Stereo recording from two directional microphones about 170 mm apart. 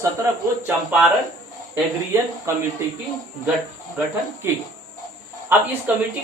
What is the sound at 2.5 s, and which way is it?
Speech, 15° right (ahead or behind).